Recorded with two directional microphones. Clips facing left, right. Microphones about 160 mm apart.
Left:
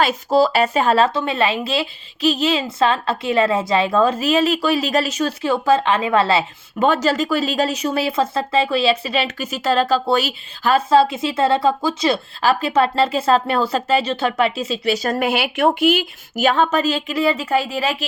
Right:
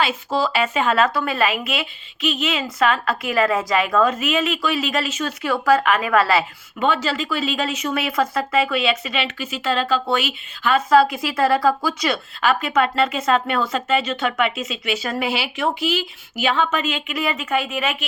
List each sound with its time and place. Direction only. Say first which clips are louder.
0.0 s speech: left 5 dB; 40° left (ahead or behind)
6.7 s speech: left 4 dB; 40° left (ahead or behind)